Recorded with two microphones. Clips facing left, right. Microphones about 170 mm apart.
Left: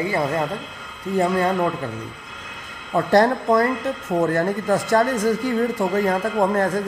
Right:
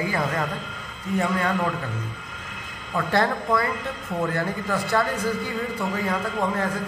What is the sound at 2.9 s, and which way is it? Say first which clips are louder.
Speech: left 6 dB; 40° left (ahead or behind).